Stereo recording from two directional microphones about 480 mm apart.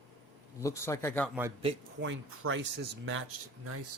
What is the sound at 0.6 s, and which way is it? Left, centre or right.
Speech, centre.